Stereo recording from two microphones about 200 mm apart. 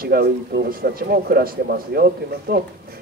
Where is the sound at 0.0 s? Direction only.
50° right (ahead or behind).